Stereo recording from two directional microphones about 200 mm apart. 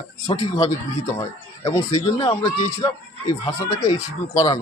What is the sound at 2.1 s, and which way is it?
Speech, 20° left (ahead or behind).